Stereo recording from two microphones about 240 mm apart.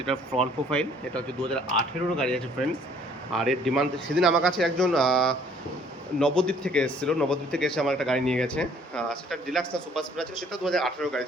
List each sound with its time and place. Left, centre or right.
0.7 s speech: centre